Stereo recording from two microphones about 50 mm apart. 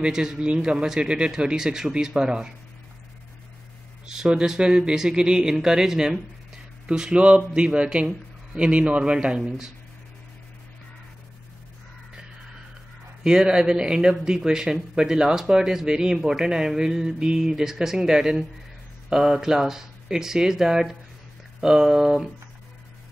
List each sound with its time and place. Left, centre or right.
0.0 s speech: centre
4.0 s a sound: centre
4.3 s speech: centre
13.2 s speech: centre